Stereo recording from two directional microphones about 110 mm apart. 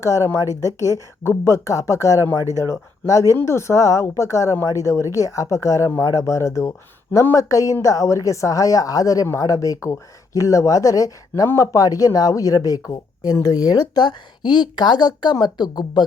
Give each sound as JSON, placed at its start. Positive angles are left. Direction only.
{"t": 0.3, "sound": "speech", "side_deg": 30}